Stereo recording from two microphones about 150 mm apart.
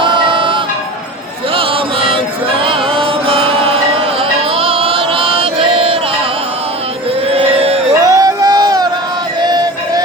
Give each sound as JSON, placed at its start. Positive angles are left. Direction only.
{"t": 0.0, "sound": "music", "side_deg": -30}
{"t": 7.3, "sound": "a sound", "side_deg": -40}
{"t": 8.0, "sound": "music", "side_deg": -25}